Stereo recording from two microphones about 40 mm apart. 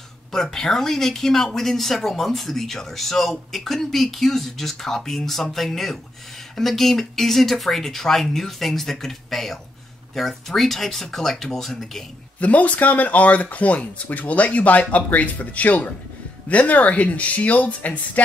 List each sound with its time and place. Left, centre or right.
0.3 s speech: centre
12.4 s speech: left